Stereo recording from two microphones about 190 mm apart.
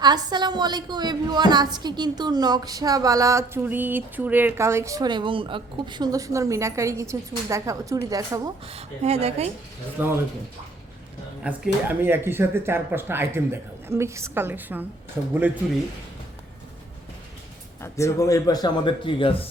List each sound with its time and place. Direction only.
0.0 s a woman's voice: 20° right (ahead or behind)
8.6 s speech: 30° right (ahead or behind)
10.0 s speech: 10° right (ahead or behind)
11.4 s speech: 10° right (ahead or behind)
17.8 s speech: 15° left (ahead or behind)